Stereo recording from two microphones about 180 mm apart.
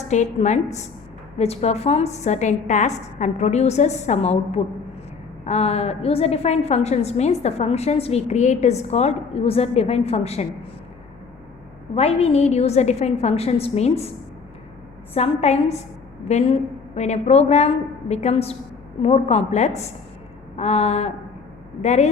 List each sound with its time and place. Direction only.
0.1 s a woman's voice: 40° left (ahead or behind)
11.9 s a woman's voice: 35° left (ahead or behind)
15.1 s a woman's voice: 35° left (ahead or behind)